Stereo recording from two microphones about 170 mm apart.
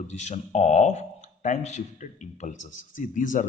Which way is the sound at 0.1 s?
40° left (ahead or behind).